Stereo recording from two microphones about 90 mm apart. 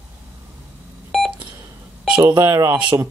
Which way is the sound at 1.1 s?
Centre (ahead or behind).